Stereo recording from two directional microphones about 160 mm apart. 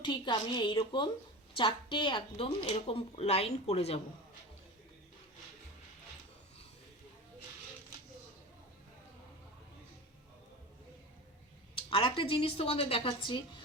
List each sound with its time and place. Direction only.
0.0 s a woman's voice: 30° left (ahead or behind)
11.7 s speech: 35° left (ahead or behind)